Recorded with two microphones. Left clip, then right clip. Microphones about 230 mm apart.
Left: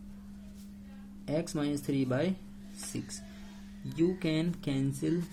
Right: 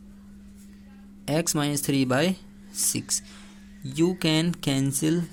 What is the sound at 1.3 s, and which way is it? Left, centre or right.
Speech, right.